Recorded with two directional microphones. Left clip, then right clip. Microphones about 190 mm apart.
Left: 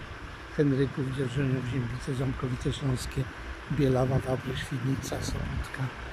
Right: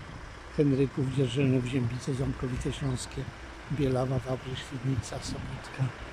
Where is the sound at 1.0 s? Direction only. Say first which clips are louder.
Right 1 dB; 25° right (ahead or behind).